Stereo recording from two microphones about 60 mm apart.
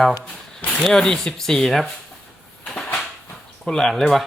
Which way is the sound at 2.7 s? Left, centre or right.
Centre.